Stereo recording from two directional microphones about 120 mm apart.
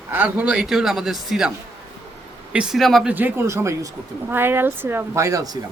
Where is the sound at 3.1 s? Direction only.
15° right (ahead or behind).